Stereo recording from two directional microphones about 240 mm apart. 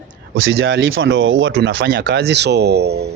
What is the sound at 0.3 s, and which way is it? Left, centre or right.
Speech, right.